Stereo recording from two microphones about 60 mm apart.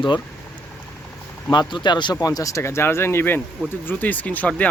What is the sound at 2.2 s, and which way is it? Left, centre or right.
Speech, left.